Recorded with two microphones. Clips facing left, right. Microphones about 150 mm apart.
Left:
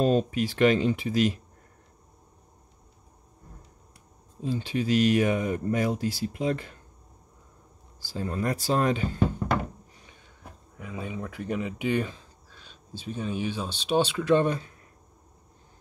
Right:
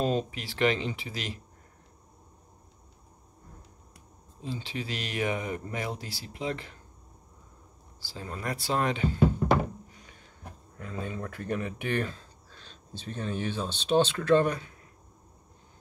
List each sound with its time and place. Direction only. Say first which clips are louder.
0.0 s speech: left 5 dB; 45° left (ahead or behind)
4.4 s speech: left 7 dB; 45° left (ahead or behind)
8.0 s speech: left 7 dB; 45° left (ahead or behind)
10.8 s speech: left 1 dB; 10° left (ahead or behind)
14.4 s speech: left 2 dB; 25° left (ahead or behind)